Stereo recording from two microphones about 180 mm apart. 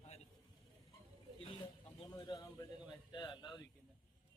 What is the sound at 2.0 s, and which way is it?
A man's voice, 20° left (ahead or behind).